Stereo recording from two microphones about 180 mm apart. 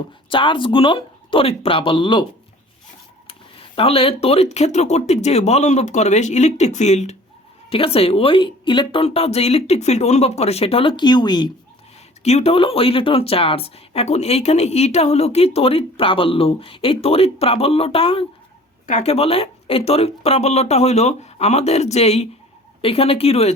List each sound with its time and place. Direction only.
0.3 s speech: 30° left (ahead or behind)
3.8 s speech: 30° left (ahead or behind)
12.2 s speech: 35° left (ahead or behind)